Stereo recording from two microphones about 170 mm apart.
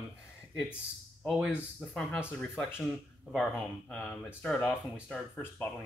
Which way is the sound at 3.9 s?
10° left (ahead or behind).